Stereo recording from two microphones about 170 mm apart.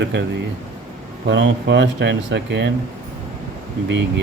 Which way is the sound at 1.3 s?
90° right.